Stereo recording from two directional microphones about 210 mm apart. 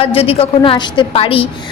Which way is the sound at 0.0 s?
25° left (ahead or behind).